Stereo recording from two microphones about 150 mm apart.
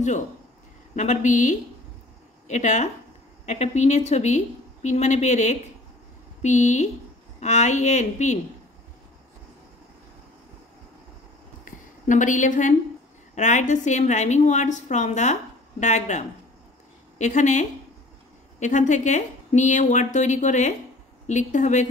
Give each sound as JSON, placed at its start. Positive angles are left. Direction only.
{"t": 0.9, "sound": "a woman's voice", "side_deg": 55}
{"t": 11.6, "sound": "a sound", "side_deg": 55}
{"t": 13.3, "sound": "speech", "side_deg": 55}